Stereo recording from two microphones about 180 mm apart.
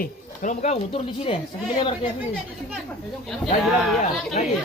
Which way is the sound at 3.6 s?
Centre (ahead or behind).